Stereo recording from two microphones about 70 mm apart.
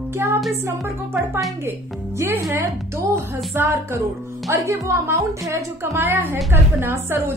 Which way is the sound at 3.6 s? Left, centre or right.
Right.